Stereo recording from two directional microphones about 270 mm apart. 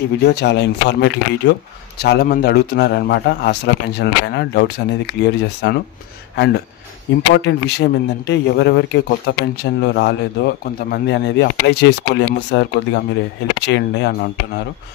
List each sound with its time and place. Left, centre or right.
0.2 s speech: left